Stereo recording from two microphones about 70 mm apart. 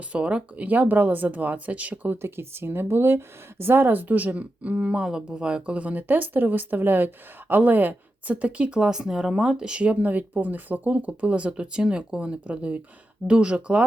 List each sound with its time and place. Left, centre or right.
0.1 s speech: centre
2.2 s speech: right; by 13.8 s centre